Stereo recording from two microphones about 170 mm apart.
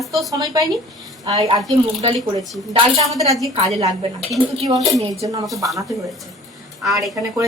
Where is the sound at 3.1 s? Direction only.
Centre (ahead or behind).